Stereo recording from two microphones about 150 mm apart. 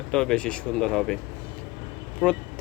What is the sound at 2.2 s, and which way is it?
Speech, centre (ahead or behind).